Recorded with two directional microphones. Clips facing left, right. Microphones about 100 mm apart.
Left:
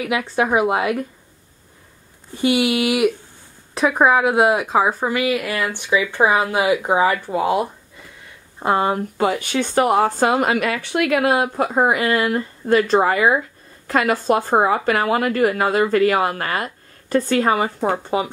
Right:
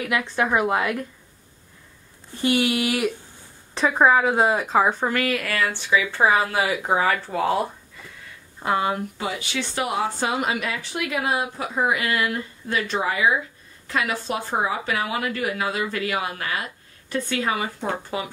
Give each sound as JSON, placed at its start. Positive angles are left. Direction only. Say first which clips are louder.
{"t": 0.4, "sound": "a woman's voice", "louder": "left 4 dB", "side_deg": 15}
{"t": 2.4, "sound": "a woman's voice", "louder": "left 4 dB", "side_deg": 10}
{"t": 8.5, "sound": "speech", "louder": "left 4 dB", "side_deg": 35}